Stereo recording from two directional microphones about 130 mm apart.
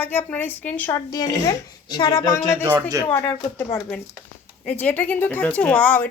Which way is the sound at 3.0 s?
10° left (ahead or behind).